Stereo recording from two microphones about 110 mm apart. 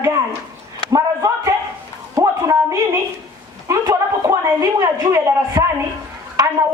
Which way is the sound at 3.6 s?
30° right (ahead or behind).